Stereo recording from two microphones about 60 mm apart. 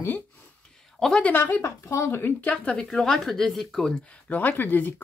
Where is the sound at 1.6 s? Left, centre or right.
Left.